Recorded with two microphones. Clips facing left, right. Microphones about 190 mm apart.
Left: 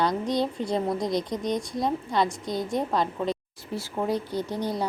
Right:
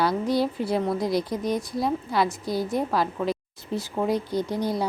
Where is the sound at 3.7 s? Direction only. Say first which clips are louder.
Right 2 dB; 20° right (ahead or behind).